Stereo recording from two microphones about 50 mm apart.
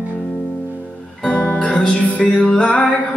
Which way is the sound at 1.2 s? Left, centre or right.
Left.